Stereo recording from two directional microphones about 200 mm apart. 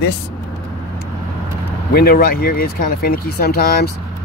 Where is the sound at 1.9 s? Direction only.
50° left (ahead or behind).